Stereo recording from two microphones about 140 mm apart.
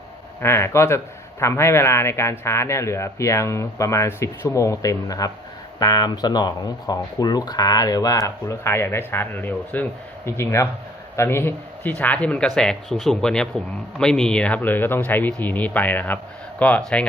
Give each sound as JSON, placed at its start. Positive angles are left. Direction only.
{"t": 0.4, "sound": "speech", "side_deg": 20}